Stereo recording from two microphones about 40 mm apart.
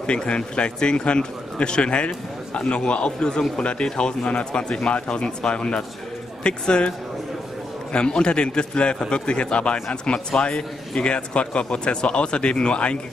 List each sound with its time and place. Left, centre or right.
0.0 s speech: left
7.9 s speech: left